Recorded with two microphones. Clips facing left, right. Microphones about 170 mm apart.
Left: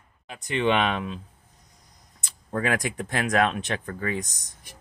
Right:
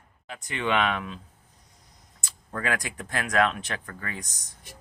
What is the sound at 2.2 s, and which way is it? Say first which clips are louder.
Speech: left 4 dB; 20° left (ahead or behind).